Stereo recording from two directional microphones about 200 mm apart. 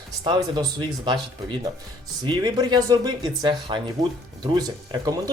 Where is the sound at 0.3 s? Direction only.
20° right (ahead or behind).